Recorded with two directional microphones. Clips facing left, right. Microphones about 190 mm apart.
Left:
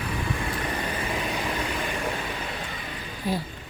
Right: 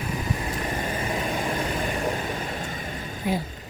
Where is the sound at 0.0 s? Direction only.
40° right (ahead or behind).